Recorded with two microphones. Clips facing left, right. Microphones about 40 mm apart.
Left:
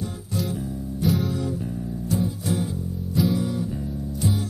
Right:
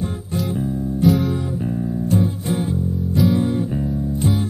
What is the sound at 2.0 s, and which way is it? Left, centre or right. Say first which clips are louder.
Music: right 4 dB; right.